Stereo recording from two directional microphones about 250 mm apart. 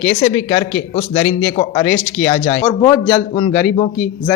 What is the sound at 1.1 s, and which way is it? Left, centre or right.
A man's voice, left.